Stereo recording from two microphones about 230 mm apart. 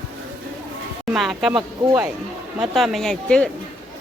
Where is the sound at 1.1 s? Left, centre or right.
Centre.